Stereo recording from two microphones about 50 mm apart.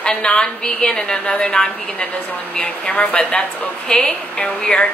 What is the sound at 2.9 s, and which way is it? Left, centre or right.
Speech, left.